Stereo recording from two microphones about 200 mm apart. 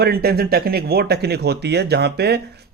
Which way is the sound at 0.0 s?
50° right (ahead or behind).